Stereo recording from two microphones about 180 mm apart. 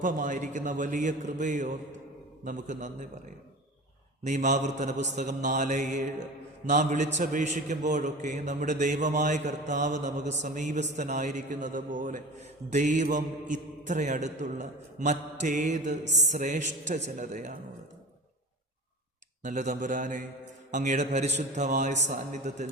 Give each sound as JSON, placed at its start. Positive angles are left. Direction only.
{"t": 0.0, "sound": "a man's voice", "side_deg": -45}
{"t": 4.2, "sound": "a man's voice", "side_deg": -40}
{"t": 19.4, "sound": "a man's voice", "side_deg": -45}